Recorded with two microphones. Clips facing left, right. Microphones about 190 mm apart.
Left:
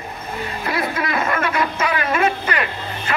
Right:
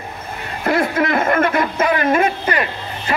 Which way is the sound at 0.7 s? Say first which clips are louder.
Right 7 dB; 50° right (ahead or behind).